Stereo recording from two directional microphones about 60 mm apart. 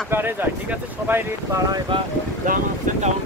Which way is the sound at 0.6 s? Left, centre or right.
Right.